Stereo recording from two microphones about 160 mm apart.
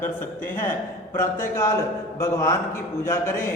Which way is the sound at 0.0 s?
15° left (ahead or behind).